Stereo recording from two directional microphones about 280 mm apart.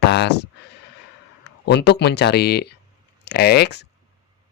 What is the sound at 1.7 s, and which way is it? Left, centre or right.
Speech, left.